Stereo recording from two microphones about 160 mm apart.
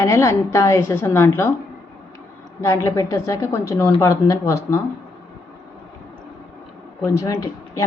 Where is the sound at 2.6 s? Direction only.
20° left (ahead or behind).